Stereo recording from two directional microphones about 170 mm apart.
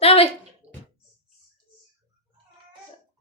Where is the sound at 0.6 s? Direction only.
35° right (ahead or behind).